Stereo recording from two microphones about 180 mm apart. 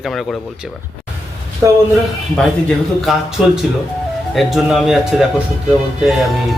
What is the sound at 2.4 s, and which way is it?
Speech, 5° left (ahead or behind).